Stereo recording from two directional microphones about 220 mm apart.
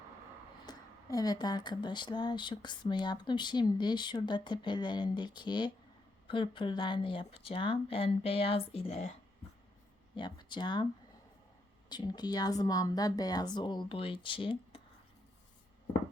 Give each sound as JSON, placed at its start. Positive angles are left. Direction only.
{"t": 0.6, "sound": "speech", "side_deg": 15}
{"t": 10.2, "sound": "speech", "side_deg": 20}
{"t": 11.9, "sound": "speech", "side_deg": 20}